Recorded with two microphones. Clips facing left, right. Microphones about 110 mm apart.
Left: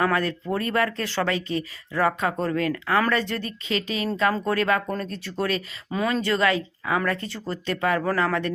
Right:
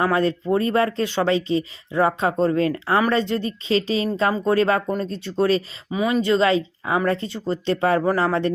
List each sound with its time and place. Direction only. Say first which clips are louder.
0.0 s speech: right 4 dB; 25° right (ahead or behind)
5.9 s speech: right 4 dB; 10° right (ahead or behind); by 8.4 s 30° right (ahead or behind)